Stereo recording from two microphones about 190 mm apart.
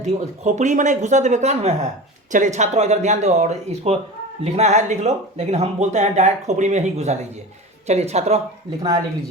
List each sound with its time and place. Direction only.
0.0 s speech: 35° right (ahead or behind)